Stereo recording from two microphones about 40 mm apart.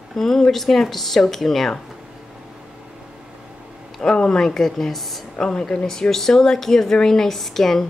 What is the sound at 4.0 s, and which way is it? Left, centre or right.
A woman's voice, centre.